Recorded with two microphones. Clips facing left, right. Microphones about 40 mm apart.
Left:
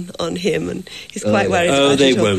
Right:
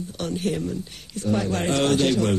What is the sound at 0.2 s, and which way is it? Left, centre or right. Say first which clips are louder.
Speech: left 7 dB; left.